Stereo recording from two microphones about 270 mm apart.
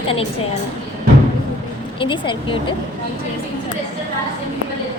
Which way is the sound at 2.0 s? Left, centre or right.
Centre.